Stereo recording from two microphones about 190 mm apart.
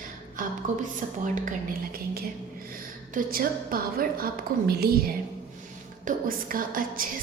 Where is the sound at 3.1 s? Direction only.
50° right (ahead or behind).